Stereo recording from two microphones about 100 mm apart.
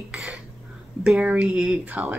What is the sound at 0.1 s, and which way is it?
Cough, 10° right (ahead or behind).